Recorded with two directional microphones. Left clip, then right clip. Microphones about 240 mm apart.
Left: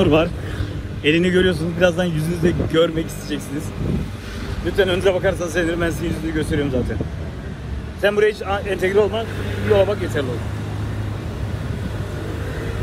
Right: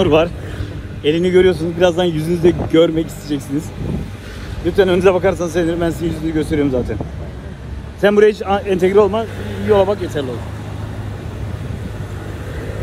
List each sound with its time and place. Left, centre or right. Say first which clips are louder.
0.0 s speech: right 3 dB; right
4.7 s speech: right 5 dB; right
8.0 s speech: right 5 dB; right